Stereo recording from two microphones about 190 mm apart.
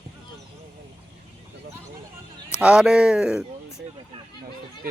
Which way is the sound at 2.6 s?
5° right (ahead or behind).